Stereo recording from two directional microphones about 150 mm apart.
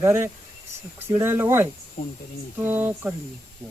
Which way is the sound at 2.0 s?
70° left (ahead or behind).